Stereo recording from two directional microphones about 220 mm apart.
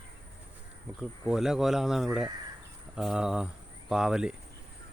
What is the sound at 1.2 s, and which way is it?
Speech, centre (ahead or behind).